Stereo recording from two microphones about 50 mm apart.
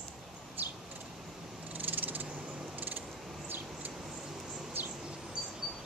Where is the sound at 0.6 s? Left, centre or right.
Right.